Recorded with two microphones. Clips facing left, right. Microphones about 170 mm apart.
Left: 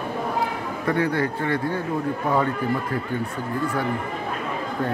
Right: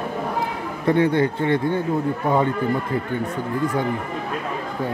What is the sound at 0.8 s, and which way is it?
Speech, 25° right (ahead or behind).